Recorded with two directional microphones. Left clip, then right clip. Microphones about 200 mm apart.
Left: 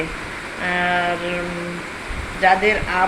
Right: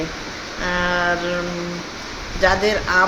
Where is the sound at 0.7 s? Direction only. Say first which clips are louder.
Left 1 dB; 15° right (ahead or behind).